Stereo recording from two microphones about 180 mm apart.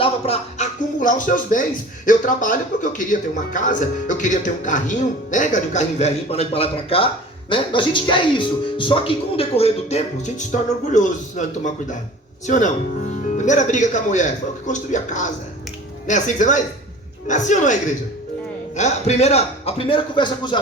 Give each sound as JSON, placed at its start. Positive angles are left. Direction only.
{"t": 0.0, "sound": "a sound", "side_deg": 35}
{"t": 0.9, "sound": "speech", "side_deg": 45}
{"t": 18.8, "sound": "speech", "side_deg": 40}